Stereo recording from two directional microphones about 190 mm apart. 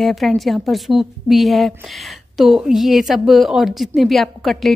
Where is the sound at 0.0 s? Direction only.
Centre (ahead or behind).